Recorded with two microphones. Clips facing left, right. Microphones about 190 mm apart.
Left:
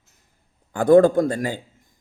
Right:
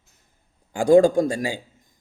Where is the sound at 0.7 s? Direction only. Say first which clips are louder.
Left 1 dB; 15° right (ahead or behind).